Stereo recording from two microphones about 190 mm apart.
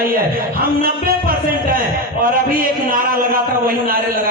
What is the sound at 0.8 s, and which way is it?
Music, 50° right (ahead or behind).